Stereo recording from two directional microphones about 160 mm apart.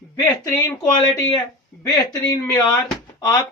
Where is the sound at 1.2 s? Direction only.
25° left (ahead or behind).